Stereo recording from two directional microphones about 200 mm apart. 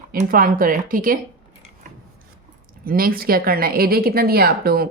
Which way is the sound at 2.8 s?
45° right (ahead or behind).